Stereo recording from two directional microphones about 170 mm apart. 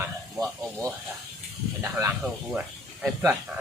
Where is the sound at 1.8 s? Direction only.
15° right (ahead or behind).